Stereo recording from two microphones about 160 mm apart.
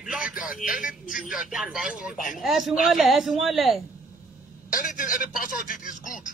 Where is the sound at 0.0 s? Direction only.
5° right (ahead or behind).